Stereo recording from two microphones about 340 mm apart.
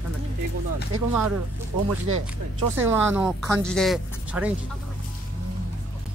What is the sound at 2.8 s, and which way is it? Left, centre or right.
Speech, centre.